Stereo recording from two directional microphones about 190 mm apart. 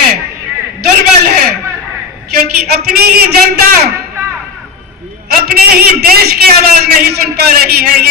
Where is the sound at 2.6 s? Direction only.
55° right (ahead or behind).